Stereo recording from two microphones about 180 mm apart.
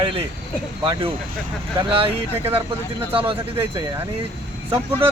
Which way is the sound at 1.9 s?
30° right (ahead or behind).